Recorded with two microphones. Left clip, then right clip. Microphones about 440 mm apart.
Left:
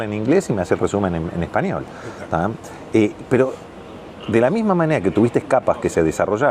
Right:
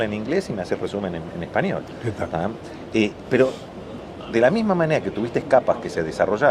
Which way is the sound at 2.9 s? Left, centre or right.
Left.